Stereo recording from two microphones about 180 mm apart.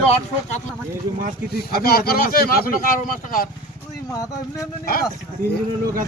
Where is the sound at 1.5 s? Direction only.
60° left (ahead or behind).